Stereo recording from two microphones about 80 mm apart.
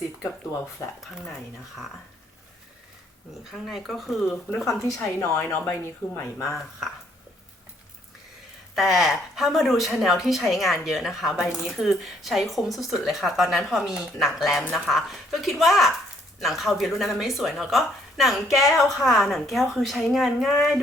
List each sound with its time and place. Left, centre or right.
0.2 s speech: left
3.5 s speech: centre
5.4 s speech: left
8.7 s speech: centre